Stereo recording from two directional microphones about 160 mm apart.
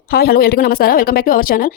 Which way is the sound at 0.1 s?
70° left (ahead or behind).